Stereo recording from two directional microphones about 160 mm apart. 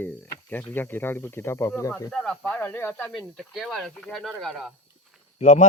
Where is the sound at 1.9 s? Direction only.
5° left (ahead or behind).